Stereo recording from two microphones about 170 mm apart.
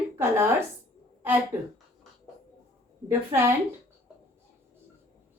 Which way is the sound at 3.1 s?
15° right (ahead or behind).